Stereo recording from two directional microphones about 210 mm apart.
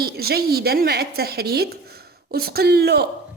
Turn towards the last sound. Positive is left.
turn(degrees=-50)  # may be behind; listen again after turning